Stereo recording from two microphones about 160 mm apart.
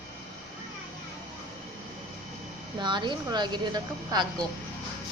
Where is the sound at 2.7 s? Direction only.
30° right (ahead or behind).